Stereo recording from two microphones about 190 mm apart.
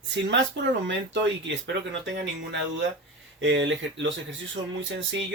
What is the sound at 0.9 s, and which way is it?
Speech, 70° right (ahead or behind).